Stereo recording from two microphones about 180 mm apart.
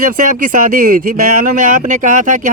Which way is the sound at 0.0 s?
50° right (ahead or behind).